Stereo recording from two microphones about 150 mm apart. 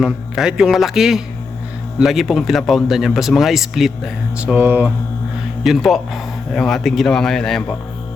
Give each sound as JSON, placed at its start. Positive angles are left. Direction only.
{"t": 0.0, "sound": "speech", "side_deg": -5}
{"t": 5.6, "sound": "speech", "side_deg": 0}